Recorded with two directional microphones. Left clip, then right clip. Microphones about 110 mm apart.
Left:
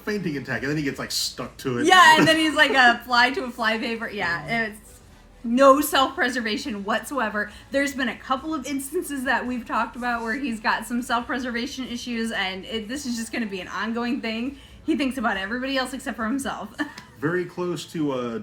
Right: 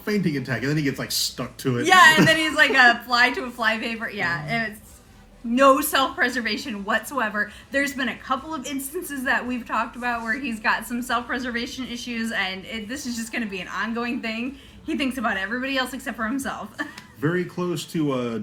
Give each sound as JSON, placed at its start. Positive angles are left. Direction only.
{"t": 0.0, "sound": "speech", "side_deg": 15}
{"t": 1.8, "sound": "a woman's voice", "side_deg": -35}
{"t": 17.2, "sound": "speech", "side_deg": 15}